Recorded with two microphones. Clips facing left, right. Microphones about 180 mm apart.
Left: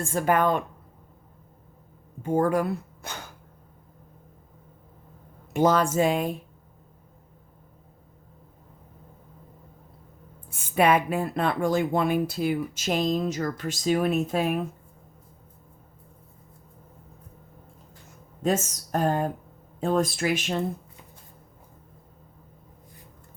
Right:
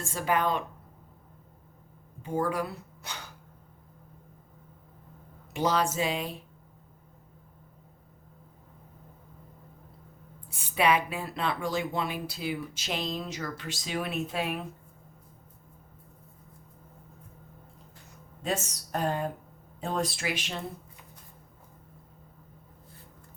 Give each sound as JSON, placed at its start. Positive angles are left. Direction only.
{"t": 0.0, "sound": "speech", "side_deg": 50}
{"t": 2.2, "sound": "speech", "side_deg": 50}
{"t": 5.5, "sound": "speech", "side_deg": 50}
{"t": 10.5, "sound": "speech", "side_deg": 50}
{"t": 18.4, "sound": "speech", "side_deg": 45}